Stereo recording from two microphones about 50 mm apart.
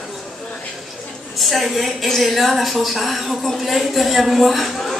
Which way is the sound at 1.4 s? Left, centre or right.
Centre.